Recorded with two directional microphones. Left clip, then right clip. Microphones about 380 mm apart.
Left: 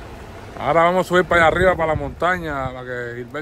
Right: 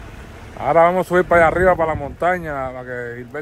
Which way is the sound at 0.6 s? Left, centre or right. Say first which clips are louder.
Right 2 dB; centre.